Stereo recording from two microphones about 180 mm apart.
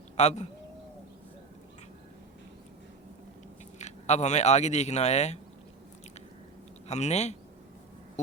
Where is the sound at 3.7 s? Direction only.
40° left (ahead or behind).